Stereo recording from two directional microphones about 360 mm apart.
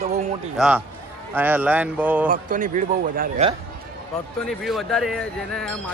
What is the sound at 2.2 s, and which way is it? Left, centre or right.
Speech, right.